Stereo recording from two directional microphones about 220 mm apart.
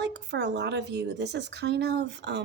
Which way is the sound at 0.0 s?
50° right (ahead or behind).